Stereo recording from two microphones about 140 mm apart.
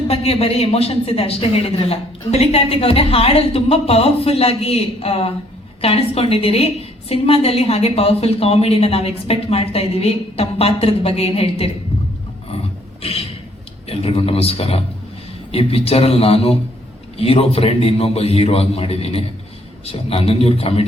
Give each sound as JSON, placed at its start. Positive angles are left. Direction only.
{"t": 0.1, "sound": "speech", "side_deg": 45}
{"t": 13.0, "sound": "a sound", "side_deg": 45}
{"t": 13.8, "sound": "speech", "side_deg": 45}